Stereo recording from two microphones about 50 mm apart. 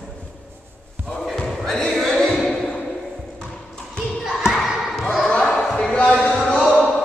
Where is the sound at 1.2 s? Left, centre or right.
Centre.